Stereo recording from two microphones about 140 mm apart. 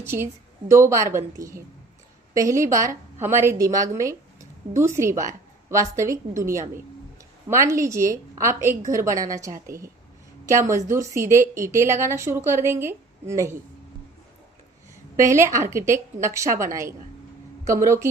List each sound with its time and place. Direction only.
0.0 s a woman's voice: 15° right (ahead or behind)
15.1 s a woman's voice: 20° right (ahead or behind)